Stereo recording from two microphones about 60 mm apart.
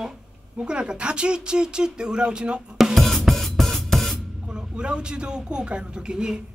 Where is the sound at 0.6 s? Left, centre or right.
Centre.